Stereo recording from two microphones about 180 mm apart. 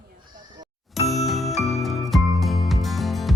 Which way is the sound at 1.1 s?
Centre (ahead or behind).